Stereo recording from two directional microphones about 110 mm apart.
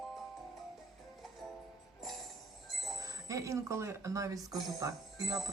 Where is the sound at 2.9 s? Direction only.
35° right (ahead or behind).